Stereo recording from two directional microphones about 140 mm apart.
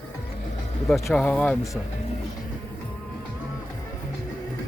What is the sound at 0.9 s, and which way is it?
Speech, 20° left (ahead or behind).